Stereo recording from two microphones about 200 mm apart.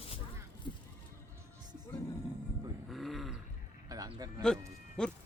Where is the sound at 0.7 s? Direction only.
25° left (ahead or behind).